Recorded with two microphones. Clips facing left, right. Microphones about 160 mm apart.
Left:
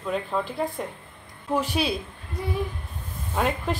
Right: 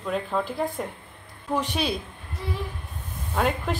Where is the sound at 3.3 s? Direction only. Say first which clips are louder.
Even; centre (ahead or behind).